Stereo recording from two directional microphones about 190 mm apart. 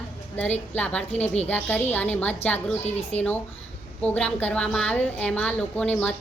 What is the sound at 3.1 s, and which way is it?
Speech, 35° left (ahead or behind).